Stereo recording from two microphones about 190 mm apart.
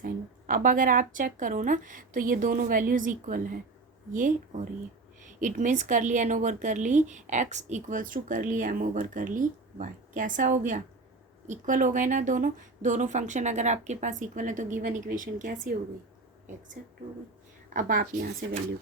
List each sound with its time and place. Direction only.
0.0 s a woman's voice: 45° right (ahead or behind)
17.7 s speech: 45° right (ahead or behind)